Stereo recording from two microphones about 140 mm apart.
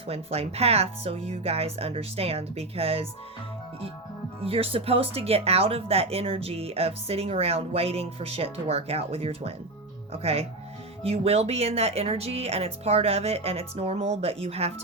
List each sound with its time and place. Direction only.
0.1 s speech: 45° right (ahead or behind)
4.4 s speech: 45° right (ahead or behind)